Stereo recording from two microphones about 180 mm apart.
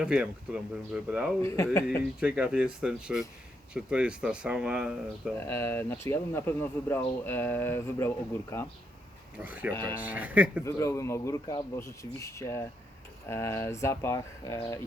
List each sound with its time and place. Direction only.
0.0 s speech: 5° right (ahead or behind)
1.4 s speech: 15° left (ahead or behind)
2.2 s speech: 5° right (ahead or behind)
5.5 s speech: 15° left (ahead or behind)
9.4 s speech: 10° right (ahead or behind)
10.7 s speech: 15° left (ahead or behind)